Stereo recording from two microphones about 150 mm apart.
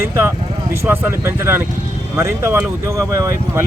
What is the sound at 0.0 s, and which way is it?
Speech, 15° right (ahead or behind).